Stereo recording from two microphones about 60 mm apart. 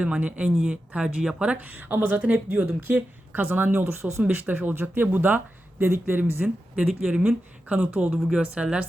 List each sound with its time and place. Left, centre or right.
0.0 s speech: right
1.5 s speech: right
6.4 s speech: right